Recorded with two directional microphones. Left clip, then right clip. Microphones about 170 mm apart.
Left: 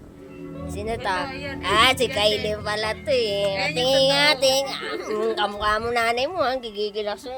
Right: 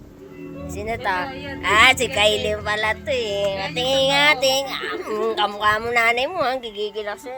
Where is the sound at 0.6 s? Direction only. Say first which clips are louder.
Right 2 dB; 15° left (ahead or behind).